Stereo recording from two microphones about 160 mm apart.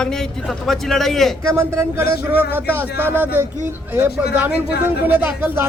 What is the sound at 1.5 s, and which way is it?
Speech, 15° right (ahead or behind).